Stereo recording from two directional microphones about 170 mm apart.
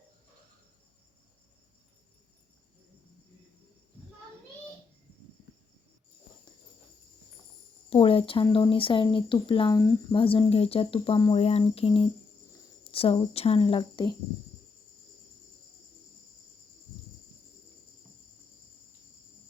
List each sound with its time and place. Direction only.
7.9 s speech: 35° left (ahead or behind)